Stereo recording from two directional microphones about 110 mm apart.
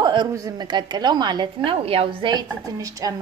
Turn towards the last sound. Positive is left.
turn(degrees=-30)  # may be behind; listen again after turning